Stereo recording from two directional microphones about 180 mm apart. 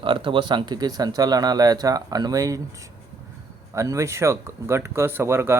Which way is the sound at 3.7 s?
15° right (ahead or behind).